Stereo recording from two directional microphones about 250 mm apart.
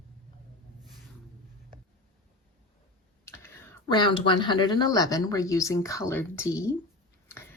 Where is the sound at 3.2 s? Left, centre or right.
Centre.